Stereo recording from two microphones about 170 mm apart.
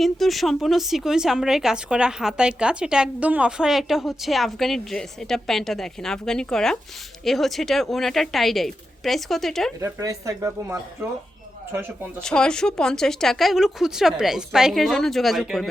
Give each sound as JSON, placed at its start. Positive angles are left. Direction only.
{"t": 0.0, "sound": "speech", "side_deg": 0}
{"t": 9.8, "sound": "speech", "side_deg": -20}
{"t": 12.2, "sound": "speech", "side_deg": 5}